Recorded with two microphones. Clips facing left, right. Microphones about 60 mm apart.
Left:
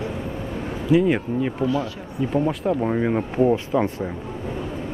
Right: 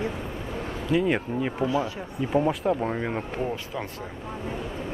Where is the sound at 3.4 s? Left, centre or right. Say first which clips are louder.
Left 11 dB; left.